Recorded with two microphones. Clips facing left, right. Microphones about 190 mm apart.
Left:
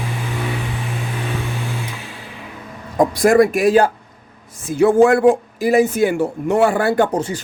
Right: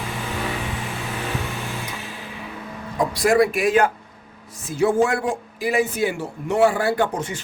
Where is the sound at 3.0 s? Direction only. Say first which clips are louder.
Left 5 dB; 50° left (ahead or behind).